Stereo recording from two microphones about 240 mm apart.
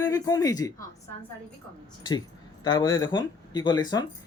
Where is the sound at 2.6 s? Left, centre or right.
Centre.